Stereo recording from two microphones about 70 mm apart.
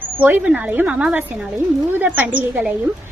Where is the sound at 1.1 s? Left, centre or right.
Right.